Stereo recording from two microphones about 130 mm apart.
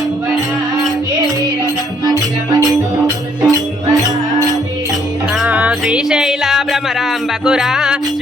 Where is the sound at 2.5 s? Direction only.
30° right (ahead or behind).